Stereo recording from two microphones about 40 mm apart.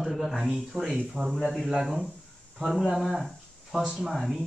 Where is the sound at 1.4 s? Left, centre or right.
Centre.